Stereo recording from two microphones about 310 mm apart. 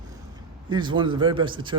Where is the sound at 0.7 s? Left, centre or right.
Centre.